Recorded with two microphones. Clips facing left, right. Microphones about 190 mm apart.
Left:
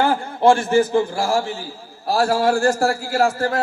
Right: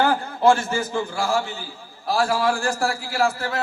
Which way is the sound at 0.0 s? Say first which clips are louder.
Left 2 dB; 25° left (ahead or behind).